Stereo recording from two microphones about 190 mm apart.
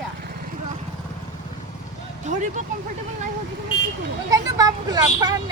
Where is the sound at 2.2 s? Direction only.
40° right (ahead or behind).